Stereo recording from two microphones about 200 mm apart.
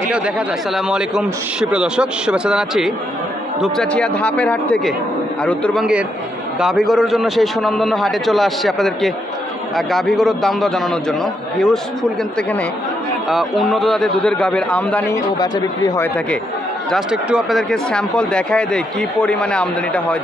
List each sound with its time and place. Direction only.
0.7 s speech: 5° right (ahead or behind)
15.3 s speech: 20° left (ahead or behind)
16.9 s speech: centre (ahead or behind)